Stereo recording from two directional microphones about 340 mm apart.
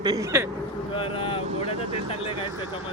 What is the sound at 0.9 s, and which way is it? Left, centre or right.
Speech, centre.